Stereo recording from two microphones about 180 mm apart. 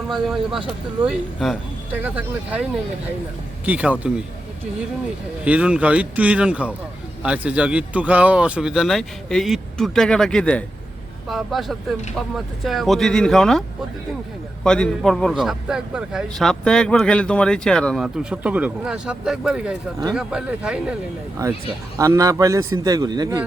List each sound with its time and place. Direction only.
0.1 s a man's voice: centre (ahead or behind)
5.5 s a man's voice: 5° right (ahead or behind)
21.9 s a man's voice: 20° right (ahead or behind)